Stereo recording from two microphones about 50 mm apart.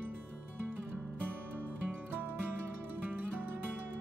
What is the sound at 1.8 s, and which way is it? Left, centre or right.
Music, right.